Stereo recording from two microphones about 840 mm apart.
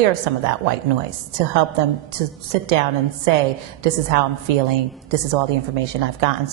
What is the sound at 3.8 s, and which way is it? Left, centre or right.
A woman's voice, right.